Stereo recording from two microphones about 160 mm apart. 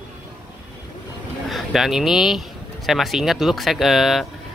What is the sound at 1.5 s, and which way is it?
Speech, centre (ahead or behind).